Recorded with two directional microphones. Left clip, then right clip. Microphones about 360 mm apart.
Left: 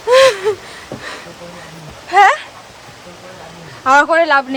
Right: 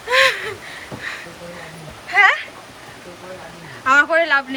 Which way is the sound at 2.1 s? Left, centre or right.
Centre.